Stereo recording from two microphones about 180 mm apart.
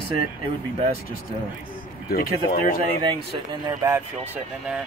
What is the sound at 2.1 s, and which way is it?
Speech, 55° left (ahead or behind).